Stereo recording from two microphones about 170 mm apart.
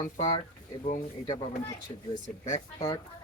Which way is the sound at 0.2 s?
45° left (ahead or behind).